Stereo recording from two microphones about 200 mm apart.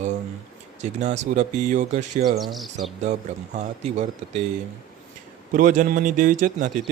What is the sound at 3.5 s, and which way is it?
Speech, 35° right (ahead or behind).